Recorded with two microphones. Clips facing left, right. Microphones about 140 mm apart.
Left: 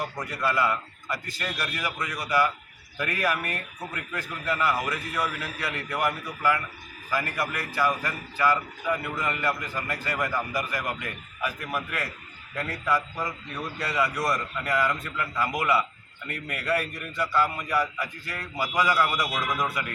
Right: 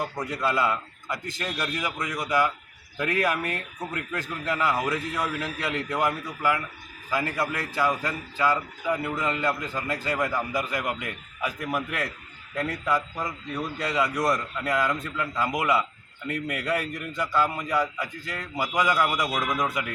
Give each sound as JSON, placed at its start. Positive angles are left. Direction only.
{"t": 0.0, "sound": "a man's voice", "side_deg": -20}